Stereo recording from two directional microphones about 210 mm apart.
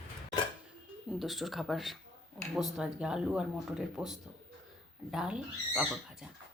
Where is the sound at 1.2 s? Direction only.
Centre (ahead or behind).